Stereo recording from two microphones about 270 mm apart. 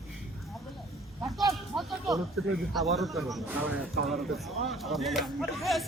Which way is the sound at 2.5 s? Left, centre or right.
Centre.